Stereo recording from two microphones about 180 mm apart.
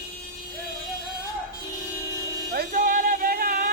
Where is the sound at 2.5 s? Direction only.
55° right (ahead or behind).